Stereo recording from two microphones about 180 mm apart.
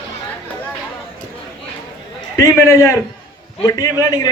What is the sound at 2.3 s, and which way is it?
Speech, 15° left (ahead or behind).